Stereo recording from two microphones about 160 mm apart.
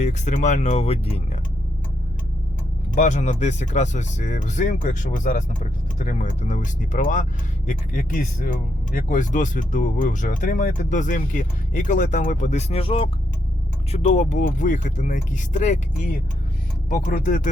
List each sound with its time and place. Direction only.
0.0 s speech: 45° left (ahead or behind)
2.9 s speech: 50° left (ahead or behind)